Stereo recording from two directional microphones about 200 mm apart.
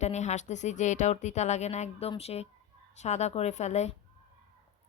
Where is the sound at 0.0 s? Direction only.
35° left (ahead or behind).